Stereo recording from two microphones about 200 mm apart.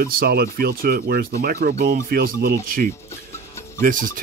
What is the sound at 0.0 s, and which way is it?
Speech, 45° right (ahead or behind).